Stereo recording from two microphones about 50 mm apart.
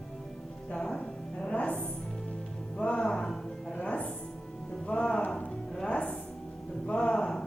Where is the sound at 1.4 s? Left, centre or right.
Left.